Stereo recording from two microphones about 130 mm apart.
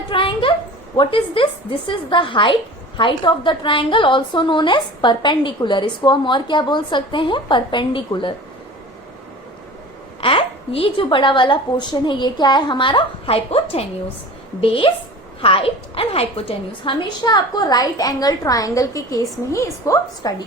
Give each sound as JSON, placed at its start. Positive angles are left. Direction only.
{"t": 0.1, "sound": "a sound", "side_deg": 40}
{"t": 0.9, "sound": "a woman's voice", "side_deg": 40}
{"t": 10.2, "sound": "a woman's voice", "side_deg": 45}